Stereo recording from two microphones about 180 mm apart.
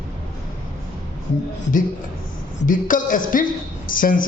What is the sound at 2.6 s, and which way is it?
A man's voice, 50° left (ahead or behind).